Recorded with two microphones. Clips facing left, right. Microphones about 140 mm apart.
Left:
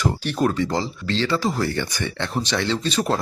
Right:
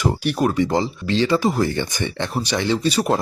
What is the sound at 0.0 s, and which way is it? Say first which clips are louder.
Speech: right 2 dB; 10° right (ahead or behind).